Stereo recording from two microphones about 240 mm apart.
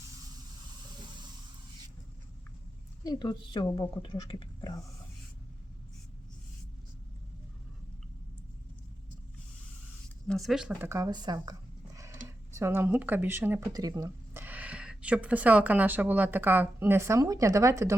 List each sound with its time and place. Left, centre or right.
3.0 s a woman's voice: centre
10.2 s speech: centre
12.5 s speech: centre